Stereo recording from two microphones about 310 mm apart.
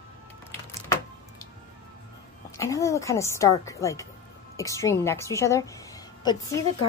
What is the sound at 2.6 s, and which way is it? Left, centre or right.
A woman's voice, centre.